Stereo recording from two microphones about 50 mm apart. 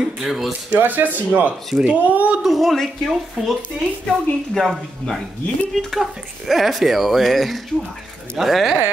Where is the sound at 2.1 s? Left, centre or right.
Right.